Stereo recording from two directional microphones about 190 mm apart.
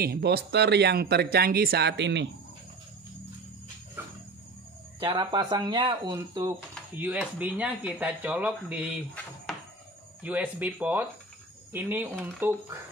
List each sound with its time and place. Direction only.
0.0 s speech: 55° right (ahead or behind)
5.0 s speech: 20° right (ahead or behind)
7.0 s speech: 10° right (ahead or behind)
10.2 s speech: 10° right (ahead or behind)